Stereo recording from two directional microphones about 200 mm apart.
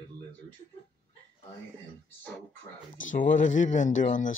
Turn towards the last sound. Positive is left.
turn(degrees=40)  # may be behind; listen again after turning